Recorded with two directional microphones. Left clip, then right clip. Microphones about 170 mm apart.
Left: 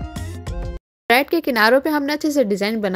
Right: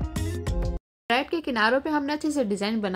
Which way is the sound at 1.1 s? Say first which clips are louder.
Left 9 dB; 30° left (ahead or behind).